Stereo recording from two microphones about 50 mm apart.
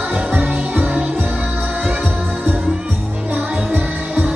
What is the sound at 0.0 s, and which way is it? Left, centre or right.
Music, right.